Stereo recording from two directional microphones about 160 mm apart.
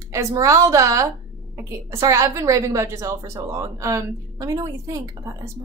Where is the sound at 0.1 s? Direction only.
20° right (ahead or behind).